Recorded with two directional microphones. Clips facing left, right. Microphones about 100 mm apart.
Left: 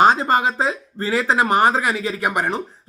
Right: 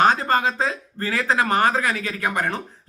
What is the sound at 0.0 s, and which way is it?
Speech, 20° left (ahead or behind).